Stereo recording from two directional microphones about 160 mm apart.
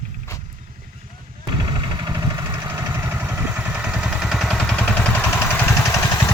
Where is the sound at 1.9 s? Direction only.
25° right (ahead or behind).